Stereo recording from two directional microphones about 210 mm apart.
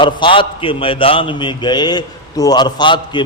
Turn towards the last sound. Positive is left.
turn(degrees=20)  # may be behind; listen again after turning